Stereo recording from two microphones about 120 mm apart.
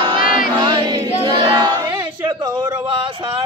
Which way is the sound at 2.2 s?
35° right (ahead or behind).